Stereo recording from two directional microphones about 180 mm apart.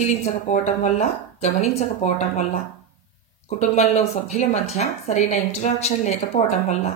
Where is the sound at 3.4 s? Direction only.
40° left (ahead or behind).